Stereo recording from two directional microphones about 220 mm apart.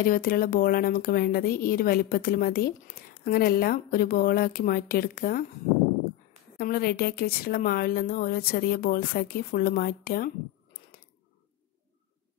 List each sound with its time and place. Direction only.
0.0 s speech: 40° left (ahead or behind)
6.6 s a woman's voice: 45° left (ahead or behind)